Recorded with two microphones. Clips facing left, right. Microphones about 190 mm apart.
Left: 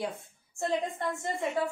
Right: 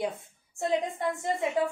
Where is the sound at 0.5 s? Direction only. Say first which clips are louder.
Right 2 dB; 15° right (ahead or behind).